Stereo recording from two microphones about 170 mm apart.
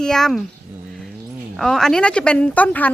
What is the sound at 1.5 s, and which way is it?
Speech, centre (ahead or behind).